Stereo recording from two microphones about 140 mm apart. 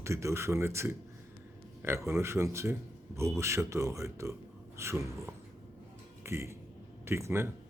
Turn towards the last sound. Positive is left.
turn(degrees=-20)  # may be behind; listen again after turning